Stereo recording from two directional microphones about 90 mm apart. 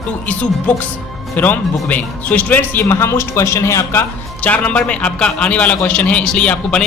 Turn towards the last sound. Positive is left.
turn(degrees=10)  # may be behind; listen again after turning